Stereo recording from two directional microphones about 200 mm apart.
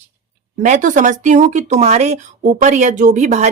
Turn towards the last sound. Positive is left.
turn(degrees=-35)  # may be behind; listen again after turning